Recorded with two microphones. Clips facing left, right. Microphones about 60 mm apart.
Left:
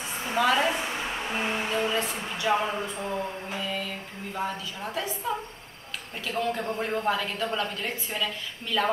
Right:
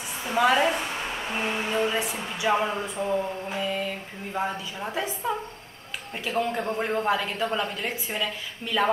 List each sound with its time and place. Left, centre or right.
0.4 s speech: centre